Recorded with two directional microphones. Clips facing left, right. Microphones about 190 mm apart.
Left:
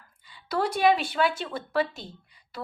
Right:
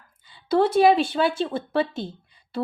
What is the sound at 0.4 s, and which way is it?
Speech, 25° right (ahead or behind).